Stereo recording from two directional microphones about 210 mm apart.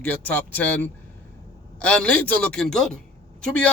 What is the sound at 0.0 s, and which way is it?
A man's voice, 5° left (ahead or behind).